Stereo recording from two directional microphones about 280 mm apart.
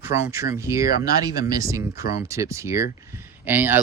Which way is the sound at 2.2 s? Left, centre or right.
Centre.